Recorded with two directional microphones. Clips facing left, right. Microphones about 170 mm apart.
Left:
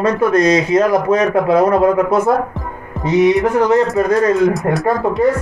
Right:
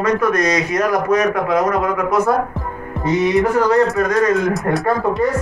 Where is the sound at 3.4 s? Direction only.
20° left (ahead or behind).